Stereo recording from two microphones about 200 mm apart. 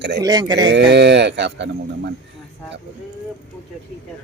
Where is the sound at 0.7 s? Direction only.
60° right (ahead or behind).